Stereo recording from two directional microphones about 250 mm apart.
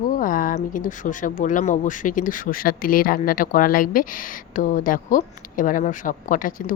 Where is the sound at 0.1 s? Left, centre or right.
Left.